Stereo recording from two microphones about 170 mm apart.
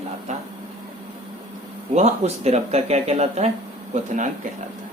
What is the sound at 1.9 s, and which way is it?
Speech, 40° right (ahead or behind).